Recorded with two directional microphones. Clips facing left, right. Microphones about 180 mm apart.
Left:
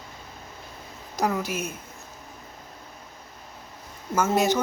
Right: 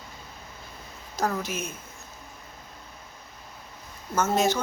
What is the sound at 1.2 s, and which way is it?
Speech, 10° left (ahead or behind).